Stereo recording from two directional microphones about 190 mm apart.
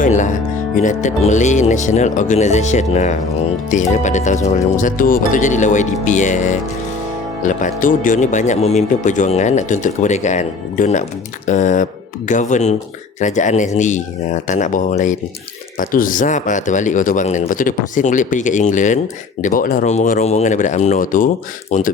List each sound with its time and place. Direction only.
0.0 s speech: 40° left (ahead or behind)